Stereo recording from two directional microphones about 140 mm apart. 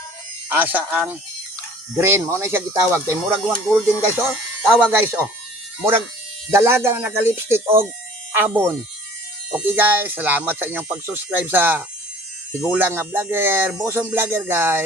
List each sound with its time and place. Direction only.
0.4 s speech: 10° right (ahead or behind)
6.5 s speech: 20° right (ahead or behind)